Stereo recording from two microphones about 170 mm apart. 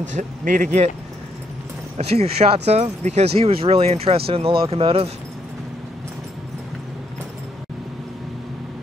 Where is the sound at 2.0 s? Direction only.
40° right (ahead or behind).